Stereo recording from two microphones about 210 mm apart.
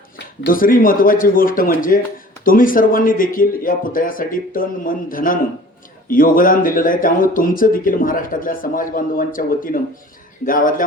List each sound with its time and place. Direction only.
0.4 s speech: 40° left (ahead or behind)